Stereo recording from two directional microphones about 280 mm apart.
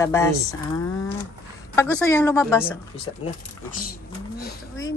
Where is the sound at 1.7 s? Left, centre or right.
Centre.